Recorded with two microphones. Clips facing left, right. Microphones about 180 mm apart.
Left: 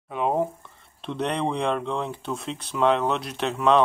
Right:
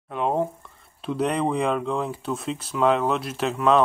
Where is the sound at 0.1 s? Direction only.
Centre (ahead or behind).